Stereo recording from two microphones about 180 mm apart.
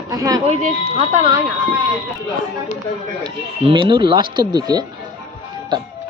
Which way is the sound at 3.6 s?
25° right (ahead or behind).